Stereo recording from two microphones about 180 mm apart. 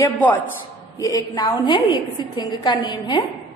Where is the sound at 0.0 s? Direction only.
10° left (ahead or behind).